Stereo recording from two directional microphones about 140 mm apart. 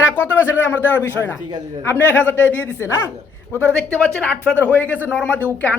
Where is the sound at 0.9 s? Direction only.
15° left (ahead or behind).